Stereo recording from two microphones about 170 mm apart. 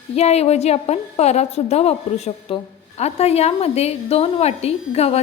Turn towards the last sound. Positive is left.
turn(degrees=40)  # may be behind; listen again after turning